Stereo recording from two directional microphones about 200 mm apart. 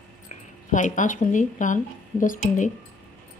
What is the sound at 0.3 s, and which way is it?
A woman's voice, 40° left (ahead or behind).